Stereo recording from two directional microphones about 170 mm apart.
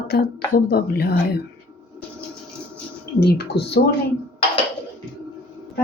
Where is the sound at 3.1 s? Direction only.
70° left (ahead or behind).